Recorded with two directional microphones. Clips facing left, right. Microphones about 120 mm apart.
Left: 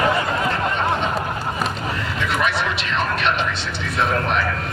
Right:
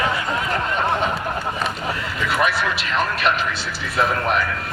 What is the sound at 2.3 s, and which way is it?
Speech, centre (ahead or behind).